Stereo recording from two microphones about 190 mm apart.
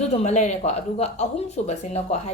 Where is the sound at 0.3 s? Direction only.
35° left (ahead or behind).